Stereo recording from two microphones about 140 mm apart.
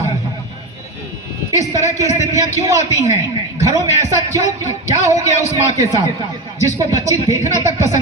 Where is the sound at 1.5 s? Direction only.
20° right (ahead or behind).